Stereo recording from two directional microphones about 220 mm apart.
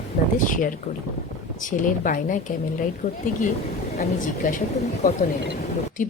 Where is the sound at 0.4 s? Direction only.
40° left (ahead or behind).